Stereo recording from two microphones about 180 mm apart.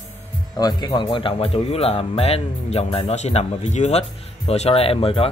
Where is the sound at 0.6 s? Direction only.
20° left (ahead or behind).